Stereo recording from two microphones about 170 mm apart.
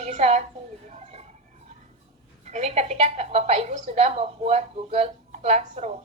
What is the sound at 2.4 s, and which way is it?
A woman's voice, 40° right (ahead or behind).